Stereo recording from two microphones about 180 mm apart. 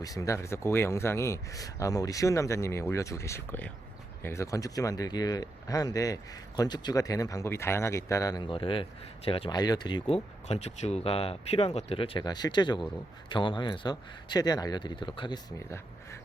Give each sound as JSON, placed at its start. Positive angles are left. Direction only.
{"t": 0.0, "sound": "a man's voice", "side_deg": 20}